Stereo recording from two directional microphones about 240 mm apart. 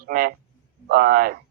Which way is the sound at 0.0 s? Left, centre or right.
Right.